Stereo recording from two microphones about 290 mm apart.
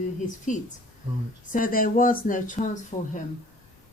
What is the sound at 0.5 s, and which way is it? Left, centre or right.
Speech, left.